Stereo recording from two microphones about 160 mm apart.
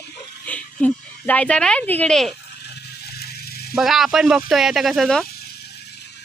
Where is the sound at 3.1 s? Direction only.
80° left.